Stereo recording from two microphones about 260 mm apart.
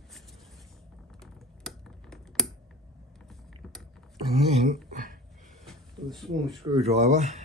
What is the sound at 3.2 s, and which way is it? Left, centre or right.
Mechanisms, centre.